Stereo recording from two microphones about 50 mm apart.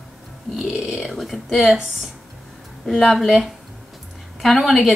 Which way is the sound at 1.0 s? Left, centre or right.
Centre.